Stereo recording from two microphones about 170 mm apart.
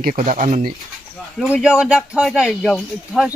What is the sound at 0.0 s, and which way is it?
Speech, 45° right (ahead or behind).